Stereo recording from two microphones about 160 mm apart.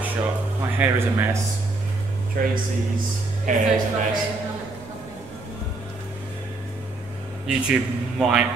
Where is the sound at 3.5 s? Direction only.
55° right (ahead or behind).